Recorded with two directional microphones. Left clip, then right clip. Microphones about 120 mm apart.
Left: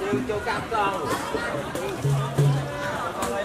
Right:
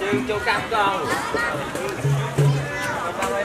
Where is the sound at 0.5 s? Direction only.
35° right (ahead or behind).